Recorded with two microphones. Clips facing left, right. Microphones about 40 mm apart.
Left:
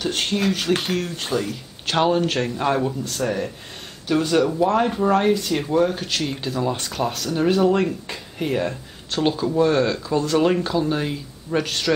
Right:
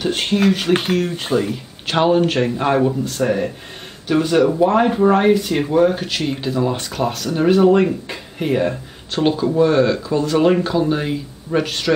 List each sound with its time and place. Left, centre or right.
0.0 s speech: centre
0.8 s speech: centre